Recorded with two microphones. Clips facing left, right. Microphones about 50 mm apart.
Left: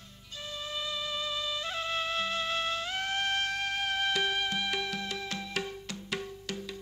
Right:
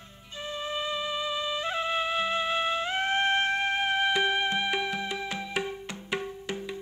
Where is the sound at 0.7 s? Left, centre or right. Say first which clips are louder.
Right 4 dB; right.